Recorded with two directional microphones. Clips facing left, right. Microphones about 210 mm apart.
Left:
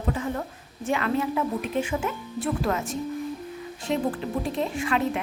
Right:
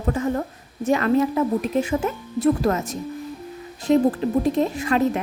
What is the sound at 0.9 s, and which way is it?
A woman's voice, 40° right (ahead or behind).